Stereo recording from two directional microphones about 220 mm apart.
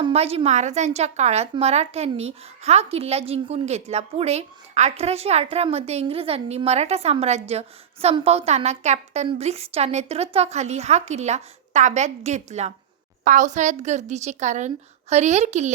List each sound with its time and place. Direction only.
0.0 s a woman's voice: 25° right (ahead or behind)